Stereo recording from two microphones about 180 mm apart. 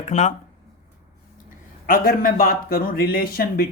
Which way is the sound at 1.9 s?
55° left (ahead or behind).